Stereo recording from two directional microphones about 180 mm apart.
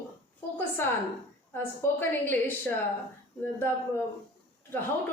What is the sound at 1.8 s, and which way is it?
Speech, 10° left (ahead or behind).